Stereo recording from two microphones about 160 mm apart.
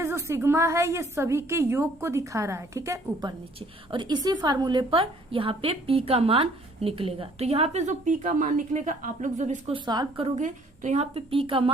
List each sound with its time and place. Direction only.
0.0 s a woman's voice: 15° right (ahead or behind); by 9.7 s 45° right (ahead or behind)
9.7 s a woman's voice: 25° right (ahead or behind)